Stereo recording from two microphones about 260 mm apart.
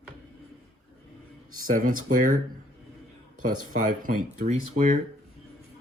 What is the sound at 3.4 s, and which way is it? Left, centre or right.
Speech, right.